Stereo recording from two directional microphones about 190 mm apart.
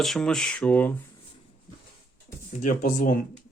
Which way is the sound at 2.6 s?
45° left (ahead or behind).